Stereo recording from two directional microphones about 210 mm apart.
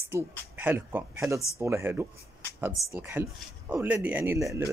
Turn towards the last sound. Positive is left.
turn(degrees=-10)  # may be behind; listen again after turning